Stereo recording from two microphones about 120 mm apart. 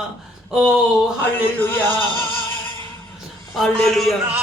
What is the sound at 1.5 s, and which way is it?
Speech, 15° left (ahead or behind).